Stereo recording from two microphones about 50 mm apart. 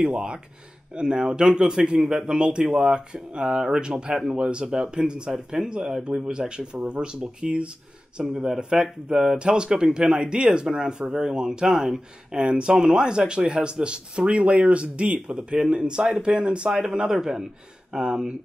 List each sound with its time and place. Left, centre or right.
0.0 s speech: centre